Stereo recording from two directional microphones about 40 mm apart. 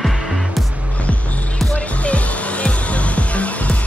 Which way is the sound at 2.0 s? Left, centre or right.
Left.